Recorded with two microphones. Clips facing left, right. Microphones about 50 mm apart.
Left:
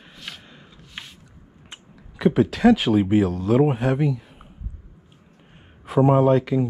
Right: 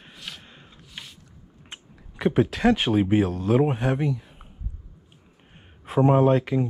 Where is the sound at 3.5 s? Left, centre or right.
Left.